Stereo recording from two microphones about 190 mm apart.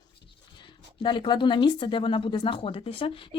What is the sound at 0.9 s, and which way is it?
Speech, 25° left (ahead or behind).